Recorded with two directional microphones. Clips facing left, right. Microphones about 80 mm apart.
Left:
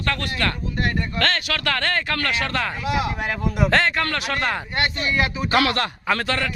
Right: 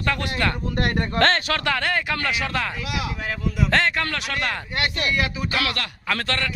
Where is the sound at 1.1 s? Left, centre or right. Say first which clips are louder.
Right 3 dB; right.